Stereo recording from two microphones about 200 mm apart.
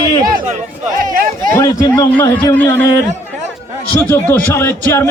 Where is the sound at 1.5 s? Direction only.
15° left (ahead or behind).